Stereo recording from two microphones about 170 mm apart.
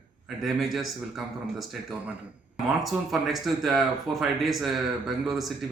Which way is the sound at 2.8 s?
Centre (ahead or behind).